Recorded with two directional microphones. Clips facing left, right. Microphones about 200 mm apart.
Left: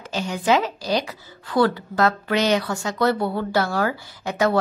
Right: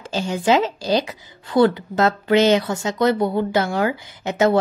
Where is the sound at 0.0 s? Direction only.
30° right (ahead or behind).